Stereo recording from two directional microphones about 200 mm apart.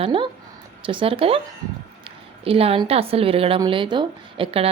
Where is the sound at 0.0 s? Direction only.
25° right (ahead or behind).